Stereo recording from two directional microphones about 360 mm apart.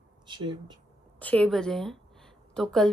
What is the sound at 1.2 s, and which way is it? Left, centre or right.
A woman's voice, centre.